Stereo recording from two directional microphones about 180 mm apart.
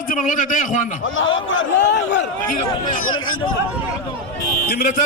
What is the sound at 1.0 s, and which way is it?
Speech, 90° left.